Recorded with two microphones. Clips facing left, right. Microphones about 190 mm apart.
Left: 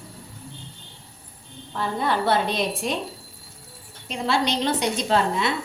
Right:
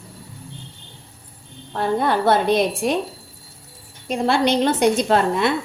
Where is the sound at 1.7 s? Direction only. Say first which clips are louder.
Right 5 dB; 50° right (ahead or behind).